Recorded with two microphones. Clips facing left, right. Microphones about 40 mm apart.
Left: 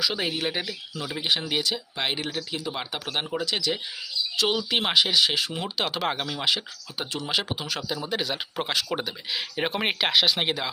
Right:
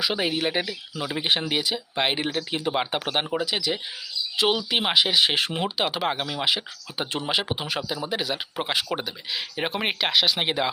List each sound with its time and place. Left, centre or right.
0.0 s speech: centre
1.5 s speech: centre; by 3.1 s right
3.1 s speech: centre
5.2 s speech: right
5.6 s speech: centre